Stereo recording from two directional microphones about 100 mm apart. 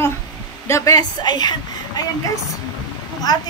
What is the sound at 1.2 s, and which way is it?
Speech, 45° left (ahead or behind).